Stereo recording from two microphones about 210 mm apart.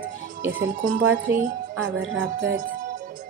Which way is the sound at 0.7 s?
40° right (ahead or behind).